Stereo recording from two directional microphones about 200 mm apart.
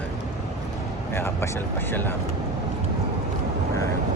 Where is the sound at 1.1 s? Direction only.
10° left (ahead or behind).